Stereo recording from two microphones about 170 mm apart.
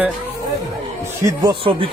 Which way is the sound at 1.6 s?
30° right (ahead or behind).